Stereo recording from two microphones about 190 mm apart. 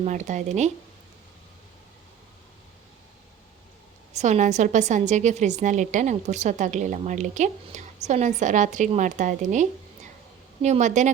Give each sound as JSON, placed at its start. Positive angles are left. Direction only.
{"t": 0.0, "sound": "a woman's voice", "side_deg": -40}
{"t": 4.1, "sound": "a woman's voice", "side_deg": -35}